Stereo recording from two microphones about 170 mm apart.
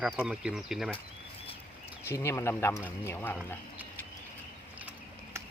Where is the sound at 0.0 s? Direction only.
5° right (ahead or behind).